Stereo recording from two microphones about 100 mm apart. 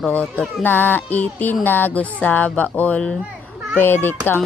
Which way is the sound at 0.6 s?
20° left (ahead or behind).